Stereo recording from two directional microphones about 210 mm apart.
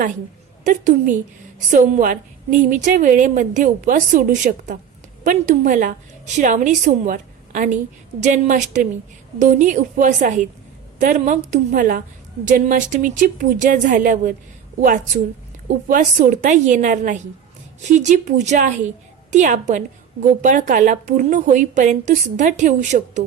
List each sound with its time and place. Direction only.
0.6 s a woman's voice: 35° right (ahead or behind)